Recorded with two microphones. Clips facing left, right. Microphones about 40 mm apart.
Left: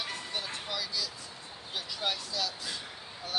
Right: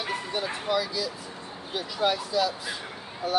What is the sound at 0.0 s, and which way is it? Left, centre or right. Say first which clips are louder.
Speech: right 7 dB; centre.